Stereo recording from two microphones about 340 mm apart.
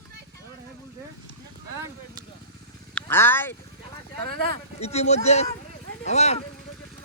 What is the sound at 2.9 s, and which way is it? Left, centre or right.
Speech, centre.